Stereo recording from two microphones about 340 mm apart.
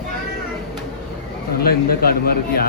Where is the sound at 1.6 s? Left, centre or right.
Left.